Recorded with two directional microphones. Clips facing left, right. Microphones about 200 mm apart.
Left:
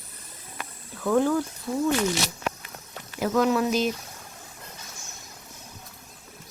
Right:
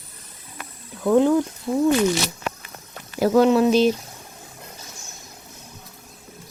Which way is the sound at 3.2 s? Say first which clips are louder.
Right 7 dB; 30° right (ahead or behind).